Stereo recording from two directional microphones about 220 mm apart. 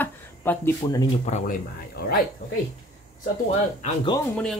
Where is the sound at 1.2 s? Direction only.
30° left (ahead or behind).